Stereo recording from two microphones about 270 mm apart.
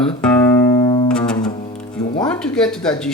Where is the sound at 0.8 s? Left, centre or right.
Centre.